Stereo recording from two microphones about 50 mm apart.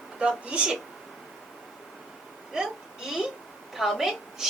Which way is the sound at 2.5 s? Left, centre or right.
Centre.